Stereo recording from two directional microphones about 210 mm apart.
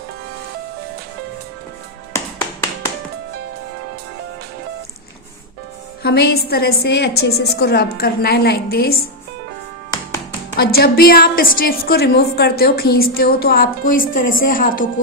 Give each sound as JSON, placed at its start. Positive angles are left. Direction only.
{"t": 2.1, "sound": "music", "side_deg": 10}
{"t": 6.0, "sound": "a woman's voice", "side_deg": 50}
{"t": 10.6, "sound": "a woman's voice", "side_deg": 45}